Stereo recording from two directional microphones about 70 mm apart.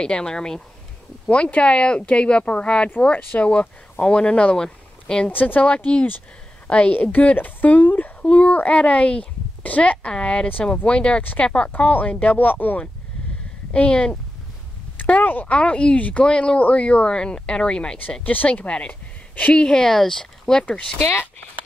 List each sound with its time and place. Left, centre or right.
0.0 s speech: centre
5.3 s a woman's voice: left
18.2 s speech: left
19.6 s speech: centre
20.6 s a woman's voice: left